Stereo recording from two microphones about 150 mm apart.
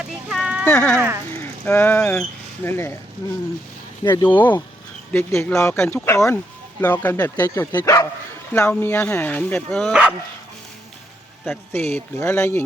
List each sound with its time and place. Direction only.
0.0 s a sound: 5° right (ahead or behind)
0.6 s speech: 10° left (ahead or behind)
0.9 s speech: 15° right (ahead or behind)
1.3 s a sound: 15° left (ahead or behind)
2.6 s speech: 15° left (ahead or behind)
4.0 s speech: 15° left (ahead or behind)
8.5 s speech: 10° left (ahead or behind)
9.9 s speech: 5° right (ahead or behind)
11.4 s speech: 15° left (ahead or behind)